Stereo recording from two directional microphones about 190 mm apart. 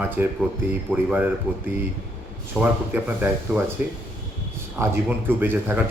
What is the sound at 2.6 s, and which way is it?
Speech, 10° right (ahead or behind).